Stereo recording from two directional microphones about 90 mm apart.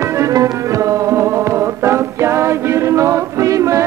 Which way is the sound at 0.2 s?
35° right (ahead or behind).